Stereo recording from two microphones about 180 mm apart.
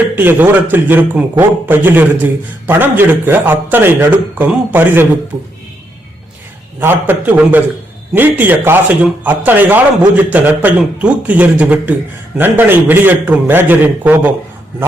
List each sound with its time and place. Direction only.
0.0 s a man's voice: 10° right (ahead or behind)
6.7 s a man's voice: 10° right (ahead or behind)